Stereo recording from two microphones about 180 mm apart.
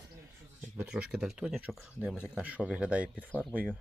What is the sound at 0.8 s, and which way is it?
Speech, 5° right (ahead or behind).